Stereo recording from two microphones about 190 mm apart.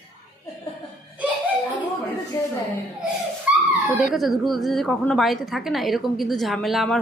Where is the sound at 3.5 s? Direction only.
5° right (ahead or behind).